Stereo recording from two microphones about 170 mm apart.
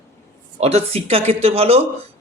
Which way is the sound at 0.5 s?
40° right (ahead or behind).